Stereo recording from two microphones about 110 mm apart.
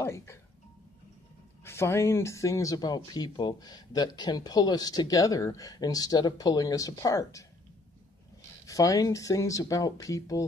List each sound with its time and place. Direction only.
0.0 s speech: 25° left (ahead or behind)
1.6 s speech: 25° left (ahead or behind)
8.6 s speech: 30° left (ahead or behind)